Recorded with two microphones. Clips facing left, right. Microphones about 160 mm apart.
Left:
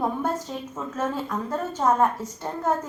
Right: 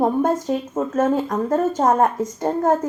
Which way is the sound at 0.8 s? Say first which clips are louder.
Right 8 dB; 45° right (ahead or behind).